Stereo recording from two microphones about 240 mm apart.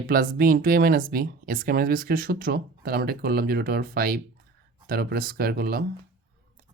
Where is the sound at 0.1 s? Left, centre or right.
Right.